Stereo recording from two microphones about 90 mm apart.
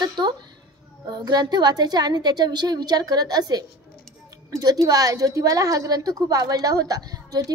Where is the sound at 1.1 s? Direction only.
50° right (ahead or behind).